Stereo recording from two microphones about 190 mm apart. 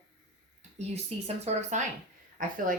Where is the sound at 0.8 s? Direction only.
35° right (ahead or behind).